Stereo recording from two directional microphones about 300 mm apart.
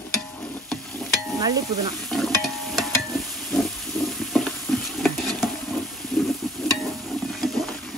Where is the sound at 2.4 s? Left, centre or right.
Centre.